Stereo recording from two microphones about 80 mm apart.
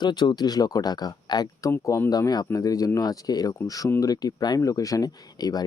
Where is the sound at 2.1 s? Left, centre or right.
Left.